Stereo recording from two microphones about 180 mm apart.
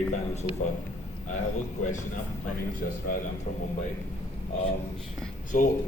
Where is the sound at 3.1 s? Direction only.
50° left (ahead or behind).